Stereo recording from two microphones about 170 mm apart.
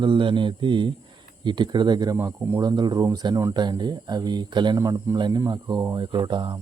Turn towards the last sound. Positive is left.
turn(degrees=-25)  # may be behind; listen again after turning